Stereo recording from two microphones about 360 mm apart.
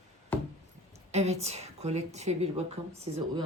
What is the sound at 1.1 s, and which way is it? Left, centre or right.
A woman's voice, centre.